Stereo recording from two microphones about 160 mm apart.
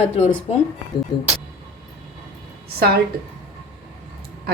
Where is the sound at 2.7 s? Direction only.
75° right (ahead or behind).